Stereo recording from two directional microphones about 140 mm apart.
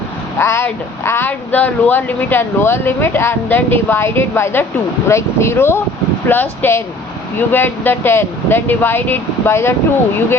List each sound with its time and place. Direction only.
0.3 s speech: 20° left (ahead or behind)